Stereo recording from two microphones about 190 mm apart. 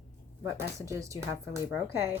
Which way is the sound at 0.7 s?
15° right (ahead or behind).